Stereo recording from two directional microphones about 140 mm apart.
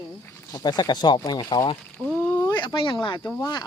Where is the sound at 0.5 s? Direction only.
30° left (ahead or behind).